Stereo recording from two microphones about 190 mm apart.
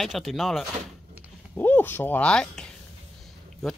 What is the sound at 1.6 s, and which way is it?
Speech, 10° left (ahead or behind).